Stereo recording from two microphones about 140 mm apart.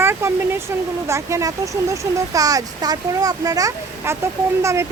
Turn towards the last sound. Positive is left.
turn(degrees=-20)  # may be behind; listen again after turning